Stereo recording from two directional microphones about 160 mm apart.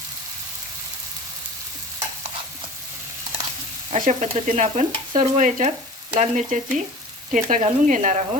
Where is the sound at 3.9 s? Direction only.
50° right (ahead or behind).